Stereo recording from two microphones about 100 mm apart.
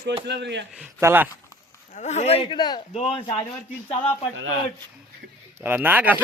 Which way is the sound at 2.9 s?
85° left.